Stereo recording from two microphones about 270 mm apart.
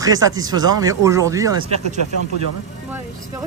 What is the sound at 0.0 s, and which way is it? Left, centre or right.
Speech, centre.